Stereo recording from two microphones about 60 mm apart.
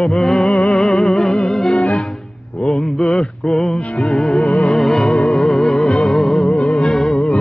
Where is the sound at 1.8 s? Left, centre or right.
Left.